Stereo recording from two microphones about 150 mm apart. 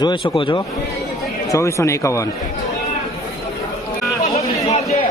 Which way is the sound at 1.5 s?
20° left (ahead or behind).